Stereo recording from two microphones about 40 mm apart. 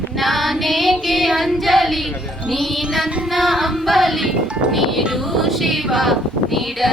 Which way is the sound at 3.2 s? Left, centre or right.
Centre.